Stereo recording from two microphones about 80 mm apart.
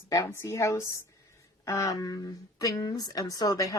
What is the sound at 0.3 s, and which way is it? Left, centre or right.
A woman's voice, left.